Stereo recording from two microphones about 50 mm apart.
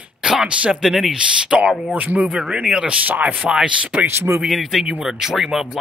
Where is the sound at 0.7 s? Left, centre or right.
Centre.